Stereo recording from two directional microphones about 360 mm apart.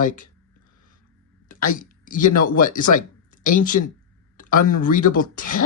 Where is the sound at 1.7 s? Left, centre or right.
Left.